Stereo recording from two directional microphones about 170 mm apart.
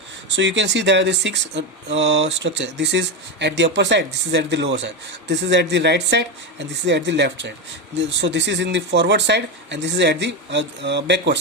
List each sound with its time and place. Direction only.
0.3 s speech: 90° right